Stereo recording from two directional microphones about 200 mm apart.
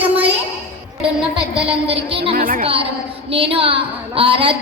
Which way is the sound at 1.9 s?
30° right (ahead or behind).